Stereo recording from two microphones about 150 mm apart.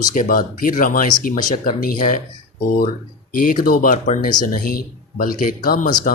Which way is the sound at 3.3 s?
70° left (ahead or behind).